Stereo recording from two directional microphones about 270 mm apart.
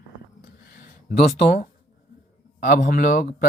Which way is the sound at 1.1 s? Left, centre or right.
Left.